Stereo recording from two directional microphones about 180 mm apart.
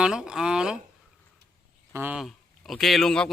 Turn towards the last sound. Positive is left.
turn(degrees=0)  # may be behind; listen again after turning